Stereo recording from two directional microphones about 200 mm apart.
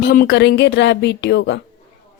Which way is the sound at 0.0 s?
50° left (ahead or behind).